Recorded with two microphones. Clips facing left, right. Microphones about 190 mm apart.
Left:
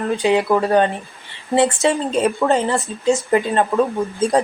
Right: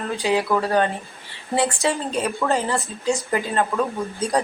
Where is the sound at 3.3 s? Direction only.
30° left (ahead or behind).